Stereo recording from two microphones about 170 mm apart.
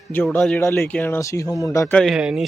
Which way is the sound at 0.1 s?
10° left (ahead or behind).